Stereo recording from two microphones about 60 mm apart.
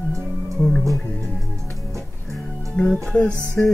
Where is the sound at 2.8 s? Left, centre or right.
Centre.